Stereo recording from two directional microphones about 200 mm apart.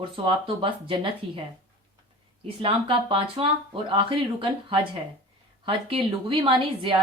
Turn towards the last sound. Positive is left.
turn(degrees=-25)  # may be behind; listen again after turning